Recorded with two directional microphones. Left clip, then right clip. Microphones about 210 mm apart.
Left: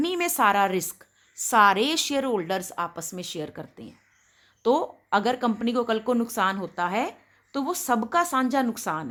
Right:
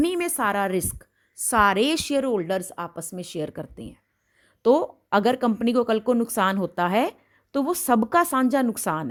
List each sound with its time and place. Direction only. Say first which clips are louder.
0.0 s a woman's voice: left 1 dB; 25° right (ahead or behind); by 9.0 s 40° right (ahead or behind)